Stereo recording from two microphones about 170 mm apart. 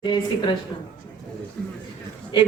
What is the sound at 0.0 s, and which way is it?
Speech, 25° left (ahead or behind).